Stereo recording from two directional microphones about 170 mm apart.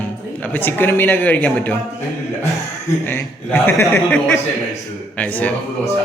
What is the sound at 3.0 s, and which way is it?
A man's voice, 10° left (ahead or behind).